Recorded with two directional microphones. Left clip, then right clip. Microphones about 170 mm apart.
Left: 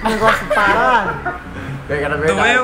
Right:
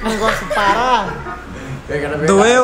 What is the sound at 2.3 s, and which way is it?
Speech, 20° right (ahead or behind).